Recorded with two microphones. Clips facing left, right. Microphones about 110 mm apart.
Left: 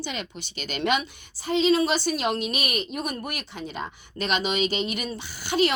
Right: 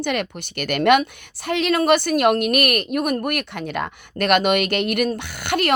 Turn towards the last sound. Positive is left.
turn(degrees=-60)  # may be behind; listen again after turning